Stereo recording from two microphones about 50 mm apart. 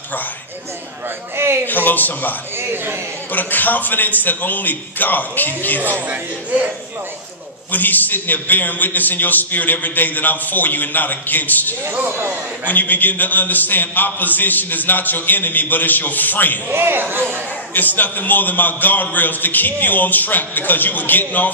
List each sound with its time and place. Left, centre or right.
1.3 s a man's voice: right
1.7 s a man's voice: left
2.5 s a man's voice: right
3.3 s a man's voice: left
5.9 s speech: right
7.7 s a man's voice: left
11.9 s speech: right
12.6 s a man's voice: left
16.8 s speech: right
17.7 s a man's voice: left